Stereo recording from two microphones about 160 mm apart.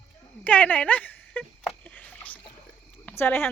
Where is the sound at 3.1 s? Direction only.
15° left (ahead or behind).